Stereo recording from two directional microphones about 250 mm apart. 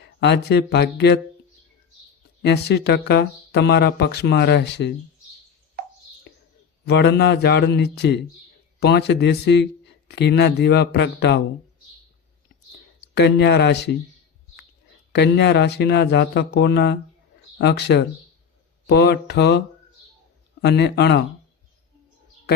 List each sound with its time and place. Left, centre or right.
0.0 s speech: left
2.4 s speech: left
6.8 s a man's voice: left
13.1 s a man's voice: left
15.1 s a man's voice: left